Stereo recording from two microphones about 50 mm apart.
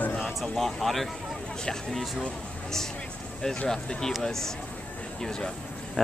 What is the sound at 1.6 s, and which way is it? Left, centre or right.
Speech, centre.